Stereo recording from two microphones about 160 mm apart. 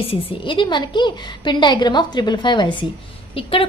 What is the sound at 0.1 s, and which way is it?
A woman's voice, 35° left (ahead or behind).